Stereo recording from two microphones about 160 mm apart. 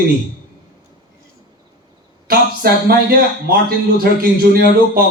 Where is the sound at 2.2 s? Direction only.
70° right (ahead or behind).